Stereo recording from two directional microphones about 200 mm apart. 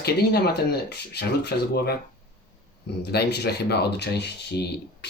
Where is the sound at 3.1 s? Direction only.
55° left (ahead or behind).